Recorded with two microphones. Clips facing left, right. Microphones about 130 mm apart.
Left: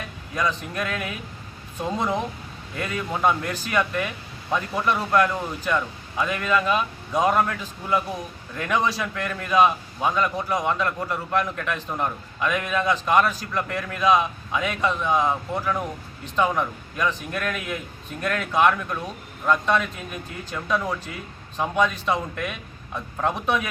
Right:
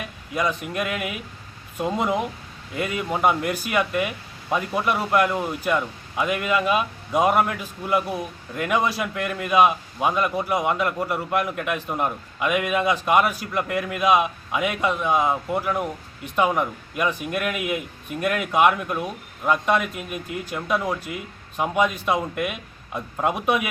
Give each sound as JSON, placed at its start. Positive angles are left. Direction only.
{"t": 0.3, "sound": "speech", "side_deg": -10}